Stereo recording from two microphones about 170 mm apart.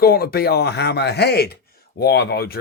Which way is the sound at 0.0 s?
65° left (ahead or behind).